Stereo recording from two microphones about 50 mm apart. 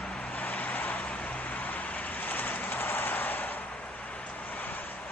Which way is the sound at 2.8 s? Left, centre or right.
Left.